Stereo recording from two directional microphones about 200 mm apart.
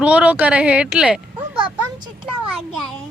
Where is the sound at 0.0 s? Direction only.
5° right (ahead or behind).